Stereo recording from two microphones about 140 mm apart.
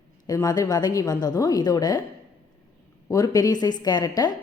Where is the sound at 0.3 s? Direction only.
25° left (ahead or behind).